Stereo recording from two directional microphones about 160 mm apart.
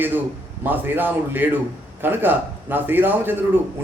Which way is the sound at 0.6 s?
10° right (ahead or behind).